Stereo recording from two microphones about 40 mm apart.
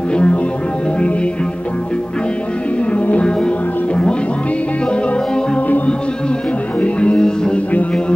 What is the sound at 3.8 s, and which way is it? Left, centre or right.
Music, left.